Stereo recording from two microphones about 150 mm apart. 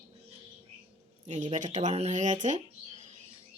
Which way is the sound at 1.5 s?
55° right (ahead or behind).